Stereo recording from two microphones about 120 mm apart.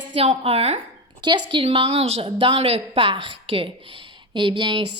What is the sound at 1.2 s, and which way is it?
Speech, 40° right (ahead or behind).